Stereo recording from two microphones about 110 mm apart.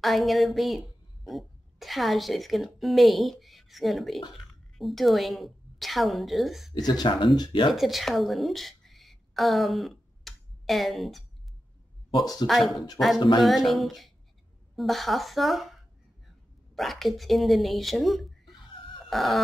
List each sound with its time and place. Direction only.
0.0 s a woman's voice: centre (ahead or behind)
6.7 s speech: 40° left (ahead or behind)
7.7 s a woman's voice: centre (ahead or behind)
12.2 s speech: 35° left (ahead or behind)
12.4 s a woman's voice: centre (ahead or behind)
19.0 s a sound: centre (ahead or behind)